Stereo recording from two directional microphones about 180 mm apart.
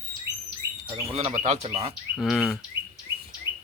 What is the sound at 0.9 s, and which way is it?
Speech, 30° right (ahead or behind).